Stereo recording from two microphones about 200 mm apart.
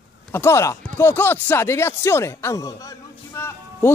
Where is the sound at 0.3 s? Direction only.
15° left (ahead or behind).